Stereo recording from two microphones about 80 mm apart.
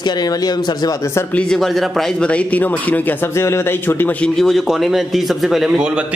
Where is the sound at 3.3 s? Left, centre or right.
Left.